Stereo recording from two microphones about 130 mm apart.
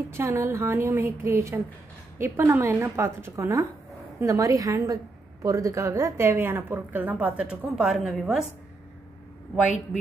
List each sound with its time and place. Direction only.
0.2 s a woman's voice: 20° right (ahead or behind); by 8.5 s 5° right (ahead or behind)